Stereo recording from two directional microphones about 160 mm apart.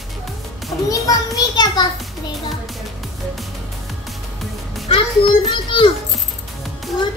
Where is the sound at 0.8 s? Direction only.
20° left (ahead or behind).